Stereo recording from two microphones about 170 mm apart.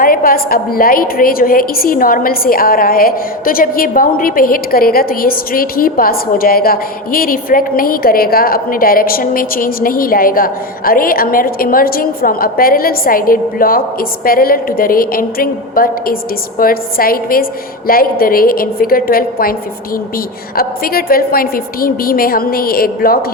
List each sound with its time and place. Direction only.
0.0 s a woman's voice: 60° left (ahead or behind)